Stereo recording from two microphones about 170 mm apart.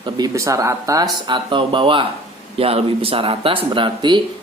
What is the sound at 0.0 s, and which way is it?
Speech, 20° right (ahead or behind).